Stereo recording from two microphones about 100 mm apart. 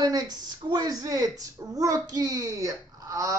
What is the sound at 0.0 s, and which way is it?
A woman's voice, 45° right (ahead or behind).